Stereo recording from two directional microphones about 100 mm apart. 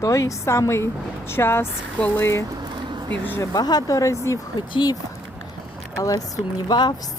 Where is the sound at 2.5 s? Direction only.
50° right (ahead or behind).